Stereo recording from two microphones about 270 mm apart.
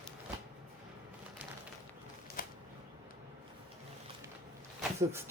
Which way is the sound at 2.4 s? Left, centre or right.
Left.